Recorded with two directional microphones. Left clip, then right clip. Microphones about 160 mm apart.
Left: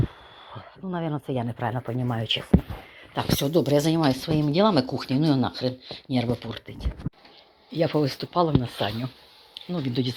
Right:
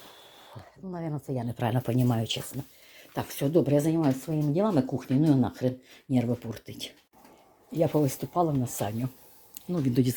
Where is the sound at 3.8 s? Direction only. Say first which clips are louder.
Left 4 dB; 15° left (ahead or behind).